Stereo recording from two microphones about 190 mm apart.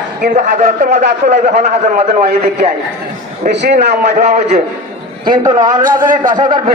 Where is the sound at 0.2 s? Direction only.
40° right (ahead or behind).